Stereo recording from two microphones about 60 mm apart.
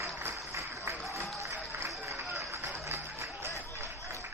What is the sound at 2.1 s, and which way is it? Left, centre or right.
Run, right.